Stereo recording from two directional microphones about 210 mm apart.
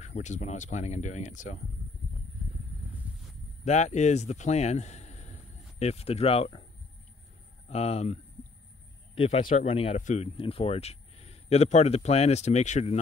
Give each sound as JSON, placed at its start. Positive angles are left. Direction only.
{"t": 0.0, "sound": "speech", "side_deg": 35}
{"t": 3.6, "sound": "speech", "side_deg": 35}
{"t": 7.7, "sound": "a man's voice", "side_deg": 30}